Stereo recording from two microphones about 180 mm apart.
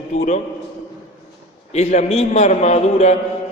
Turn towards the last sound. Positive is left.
turn(degrees=40)  # may be behind; listen again after turning